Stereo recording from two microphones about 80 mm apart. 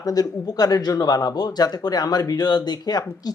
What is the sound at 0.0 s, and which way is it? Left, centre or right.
Speech, left.